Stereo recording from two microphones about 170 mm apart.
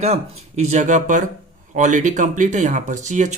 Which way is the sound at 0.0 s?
40° right (ahead or behind).